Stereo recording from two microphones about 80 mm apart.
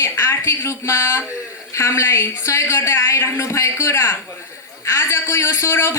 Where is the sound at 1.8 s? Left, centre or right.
Left.